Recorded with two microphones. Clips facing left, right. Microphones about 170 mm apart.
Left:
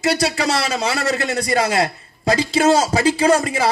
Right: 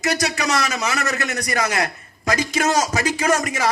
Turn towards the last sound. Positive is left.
turn(degrees=30)  # may be behind; listen again after turning